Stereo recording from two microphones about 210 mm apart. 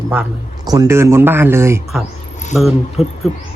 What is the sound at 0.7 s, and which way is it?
Speech, 15° right (ahead or behind).